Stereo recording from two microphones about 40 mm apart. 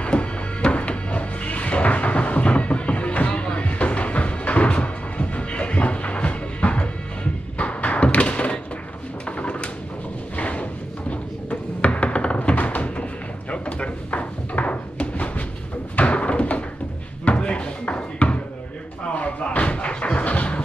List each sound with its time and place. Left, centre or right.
0.0 s music: left
7.5 s thump: left
9.4 s a sound: left
10.3 s drawer open or close: left
11.8 s tap: left
12.4 s thunk: left
13.5 s drawer open or close: left
16.0 s a sound: left